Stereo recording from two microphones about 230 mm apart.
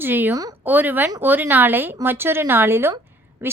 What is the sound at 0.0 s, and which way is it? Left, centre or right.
A woman's voice, centre.